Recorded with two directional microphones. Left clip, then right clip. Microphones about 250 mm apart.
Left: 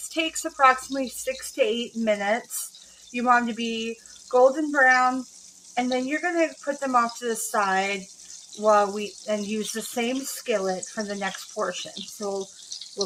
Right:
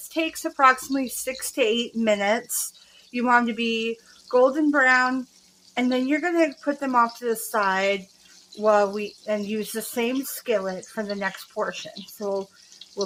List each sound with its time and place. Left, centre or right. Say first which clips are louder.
0.1 s a woman's voice: right 1 dB; centre